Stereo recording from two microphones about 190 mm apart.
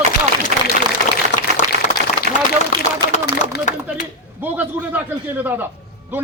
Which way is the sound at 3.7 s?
45° left (ahead or behind).